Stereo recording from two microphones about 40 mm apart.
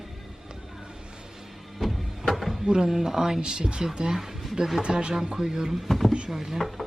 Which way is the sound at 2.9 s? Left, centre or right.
Centre.